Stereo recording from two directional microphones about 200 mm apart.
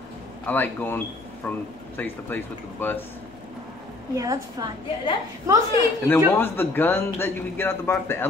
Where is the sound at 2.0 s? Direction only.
10° left (ahead or behind).